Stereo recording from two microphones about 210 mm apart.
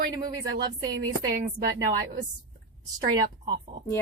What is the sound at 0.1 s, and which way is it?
Speech, 20° right (ahead or behind).